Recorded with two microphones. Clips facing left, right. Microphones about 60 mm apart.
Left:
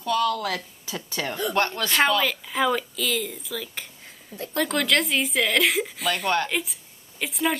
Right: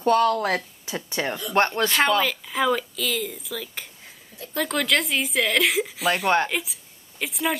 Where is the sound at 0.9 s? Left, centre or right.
Right.